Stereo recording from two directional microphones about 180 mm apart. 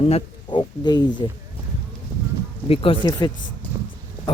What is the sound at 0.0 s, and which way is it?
Speech, 30° left (ahead or behind).